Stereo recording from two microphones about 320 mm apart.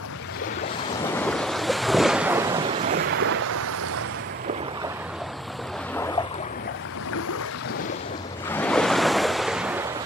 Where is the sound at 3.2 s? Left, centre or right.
Right.